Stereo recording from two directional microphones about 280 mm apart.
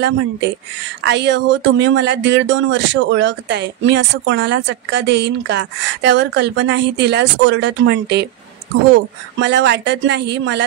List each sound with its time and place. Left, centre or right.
1.0 s speech: right